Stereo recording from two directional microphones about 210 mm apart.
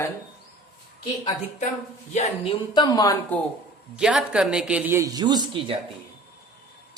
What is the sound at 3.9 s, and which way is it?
Speech, 5° right (ahead or behind).